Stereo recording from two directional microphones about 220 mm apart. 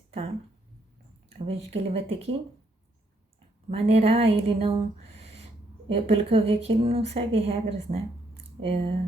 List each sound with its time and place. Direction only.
1.4 s a woman's voice: 25° right (ahead or behind)
3.7 s a woman's voice: 25° right (ahead or behind)
5.9 s a woman's voice: 25° right (ahead or behind)